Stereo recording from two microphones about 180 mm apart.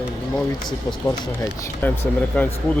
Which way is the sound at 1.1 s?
15° left (ahead or behind).